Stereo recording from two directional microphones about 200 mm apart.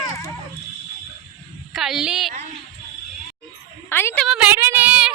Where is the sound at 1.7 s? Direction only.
Centre (ahead or behind).